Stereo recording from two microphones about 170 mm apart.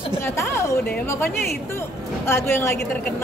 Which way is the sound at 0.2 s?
15° left (ahead or behind).